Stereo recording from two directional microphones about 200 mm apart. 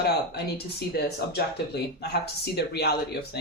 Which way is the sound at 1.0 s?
55° left (ahead or behind).